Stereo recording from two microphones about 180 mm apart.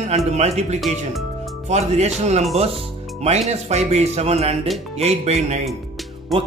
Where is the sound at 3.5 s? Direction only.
35° right (ahead or behind).